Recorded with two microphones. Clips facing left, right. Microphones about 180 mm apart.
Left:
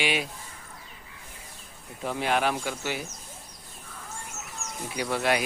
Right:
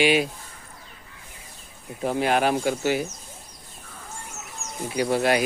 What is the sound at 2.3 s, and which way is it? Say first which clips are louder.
Speech: right 4 dB; 45° right (ahead or behind).